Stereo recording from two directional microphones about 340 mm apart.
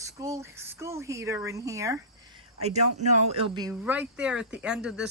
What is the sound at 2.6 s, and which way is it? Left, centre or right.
Speech, centre.